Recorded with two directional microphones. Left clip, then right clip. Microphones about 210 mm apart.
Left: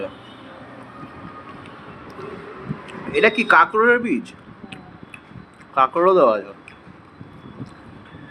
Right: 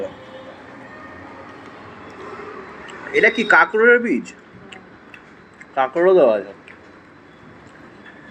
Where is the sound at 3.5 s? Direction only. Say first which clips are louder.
Right 2 dB; 10° left (ahead or behind).